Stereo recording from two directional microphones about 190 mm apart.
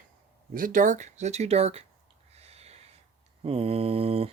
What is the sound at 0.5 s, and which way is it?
Speech, 45° right (ahead or behind).